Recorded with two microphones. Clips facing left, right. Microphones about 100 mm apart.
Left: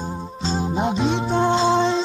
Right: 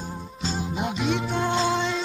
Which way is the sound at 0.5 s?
30° left (ahead or behind).